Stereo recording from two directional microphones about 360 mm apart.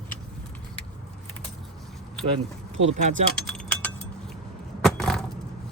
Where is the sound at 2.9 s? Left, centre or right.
Centre.